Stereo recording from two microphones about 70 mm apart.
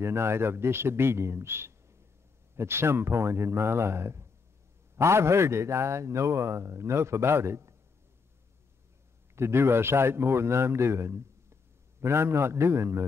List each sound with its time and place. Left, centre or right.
0.0 s a man's voice: right
9.3 s a man's voice: right